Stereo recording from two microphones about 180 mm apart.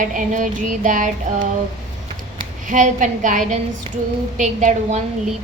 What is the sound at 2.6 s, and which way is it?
Child singing, 45° right (ahead or behind).